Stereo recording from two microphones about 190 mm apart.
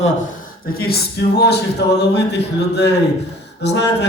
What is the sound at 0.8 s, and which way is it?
Speech, 55° left (ahead or behind).